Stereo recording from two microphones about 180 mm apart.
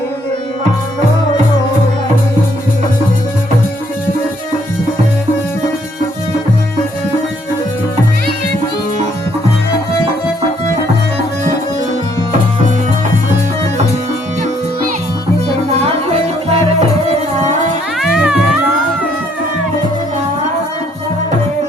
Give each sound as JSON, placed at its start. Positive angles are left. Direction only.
{"t": 16.5, "sound": "music", "side_deg": -35}
{"t": 18.0, "sound": "music", "side_deg": -5}